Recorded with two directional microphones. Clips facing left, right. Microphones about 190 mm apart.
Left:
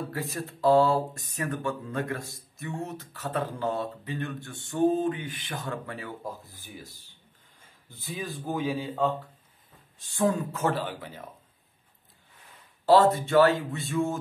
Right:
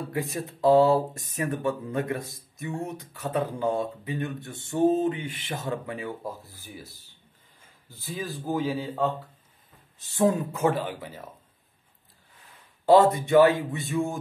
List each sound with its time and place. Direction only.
0.5 s speech: 20° right (ahead or behind)
8.0 s speech: centre (ahead or behind)
10.1 s speech: 20° right (ahead or behind)
10.6 s speech: 10° right (ahead or behind)
12.8 s speech: 15° right (ahead or behind)